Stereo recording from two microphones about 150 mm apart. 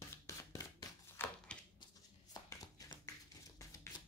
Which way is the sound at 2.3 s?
25° left (ahead or behind).